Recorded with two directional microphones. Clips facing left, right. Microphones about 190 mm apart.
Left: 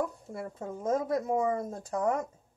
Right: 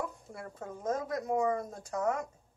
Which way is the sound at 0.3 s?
25° left (ahead or behind).